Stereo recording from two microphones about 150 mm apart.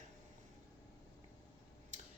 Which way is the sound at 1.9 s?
55° right (ahead or behind).